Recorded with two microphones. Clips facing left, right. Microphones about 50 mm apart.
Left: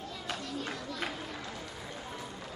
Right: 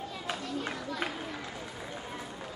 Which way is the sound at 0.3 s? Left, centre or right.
Centre.